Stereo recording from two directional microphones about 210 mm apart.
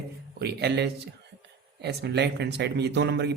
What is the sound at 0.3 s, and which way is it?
Speech, 50° right (ahead or behind).